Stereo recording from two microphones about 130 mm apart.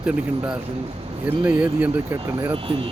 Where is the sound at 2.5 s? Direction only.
45° right (ahead or behind).